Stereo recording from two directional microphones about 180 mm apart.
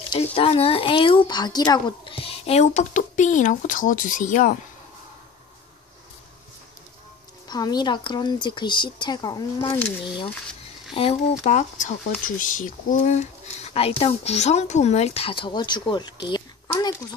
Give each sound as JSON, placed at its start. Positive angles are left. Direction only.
{"t": 0.1, "sound": "speech", "side_deg": 30}
{"t": 7.4, "sound": "speech", "side_deg": 25}
{"t": 11.0, "sound": "speech", "side_deg": 35}